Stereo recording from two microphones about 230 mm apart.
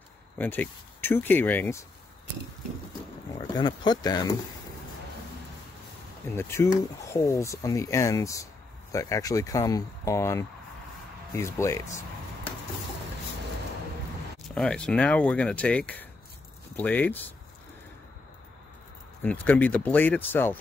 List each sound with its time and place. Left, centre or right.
0.4 s speech: centre
3.3 s speech: centre
6.3 s speech: centre
14.5 s speech: centre
19.2 s speech: centre